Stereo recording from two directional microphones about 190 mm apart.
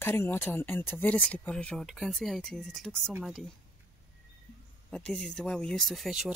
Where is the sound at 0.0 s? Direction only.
10° left (ahead or behind).